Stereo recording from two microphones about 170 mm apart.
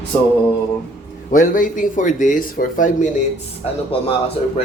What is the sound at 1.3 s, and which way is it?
Speech, 50° left (ahead or behind).